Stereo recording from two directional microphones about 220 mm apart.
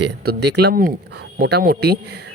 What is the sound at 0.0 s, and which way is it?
Speech, 50° right (ahead or behind).